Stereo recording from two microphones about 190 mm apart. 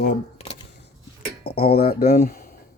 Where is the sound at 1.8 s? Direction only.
55° left (ahead or behind).